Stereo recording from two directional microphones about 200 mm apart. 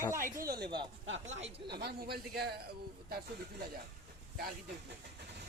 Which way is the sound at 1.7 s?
50° right (ahead or behind).